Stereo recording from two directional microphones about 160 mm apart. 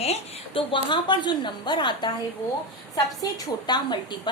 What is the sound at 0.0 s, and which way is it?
A woman's voice, 35° left (ahead or behind).